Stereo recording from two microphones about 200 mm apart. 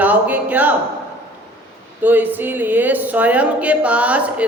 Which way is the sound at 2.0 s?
10° right (ahead or behind).